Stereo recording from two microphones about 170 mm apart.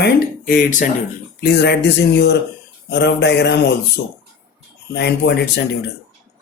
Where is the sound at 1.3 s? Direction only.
75° left (ahead or behind).